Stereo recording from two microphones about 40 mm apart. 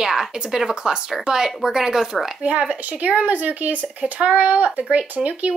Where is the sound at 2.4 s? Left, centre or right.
Right.